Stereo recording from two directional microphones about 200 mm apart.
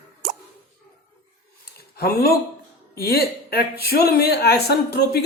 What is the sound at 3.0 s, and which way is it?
A woman's voice, 50° left (ahead or behind).